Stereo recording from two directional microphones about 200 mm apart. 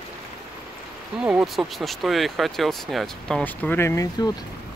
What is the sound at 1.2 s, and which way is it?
Speech, 5° right (ahead or behind).